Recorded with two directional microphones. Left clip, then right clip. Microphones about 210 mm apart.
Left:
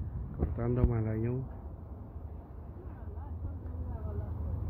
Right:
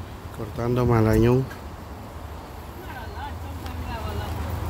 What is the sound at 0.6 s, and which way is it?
Speech, 20° right (ahead or behind).